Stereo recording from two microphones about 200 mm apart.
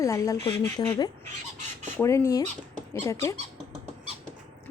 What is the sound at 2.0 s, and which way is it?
Speech, 15° left (ahead or behind).